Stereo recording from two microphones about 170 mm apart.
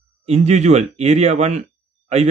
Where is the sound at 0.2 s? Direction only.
40° right (ahead or behind).